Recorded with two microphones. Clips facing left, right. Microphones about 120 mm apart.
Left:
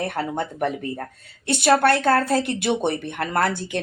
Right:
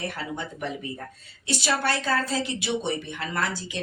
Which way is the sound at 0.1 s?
55° left (ahead or behind).